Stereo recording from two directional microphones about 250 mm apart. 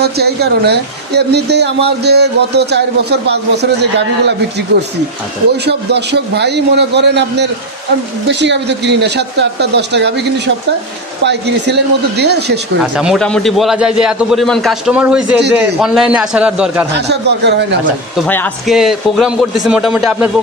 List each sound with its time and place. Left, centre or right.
0.0 s speech: right
5.7 s speech: right
12.9 s a man's voice: centre
16.9 s speech: right
18.1 s a man's voice: centre